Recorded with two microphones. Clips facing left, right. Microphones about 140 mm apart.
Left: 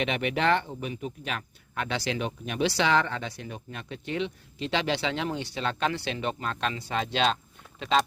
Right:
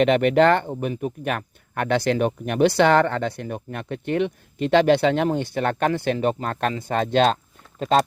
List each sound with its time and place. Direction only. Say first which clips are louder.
0.0 s speech: right 10 dB; 55° right (ahead or behind)